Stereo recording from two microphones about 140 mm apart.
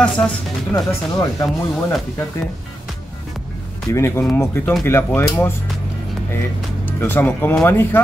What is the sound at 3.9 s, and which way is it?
Speech, 20° left (ahead or behind).